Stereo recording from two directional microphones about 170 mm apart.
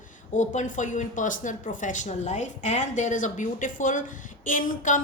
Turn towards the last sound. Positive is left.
turn(degrees=50)  # may be behind; listen again after turning